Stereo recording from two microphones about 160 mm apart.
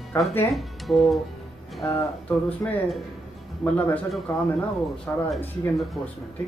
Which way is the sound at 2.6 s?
5° left (ahead or behind).